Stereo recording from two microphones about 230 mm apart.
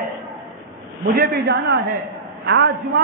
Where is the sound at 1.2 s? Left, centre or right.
Right.